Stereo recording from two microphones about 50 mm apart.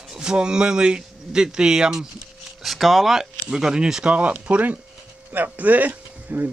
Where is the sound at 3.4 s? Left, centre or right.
Centre.